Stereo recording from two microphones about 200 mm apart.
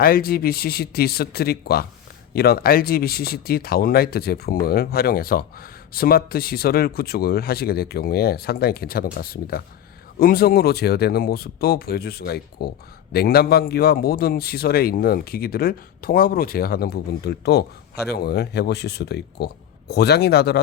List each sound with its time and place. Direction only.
0.0 s a man's voice: 50° left (ahead or behind)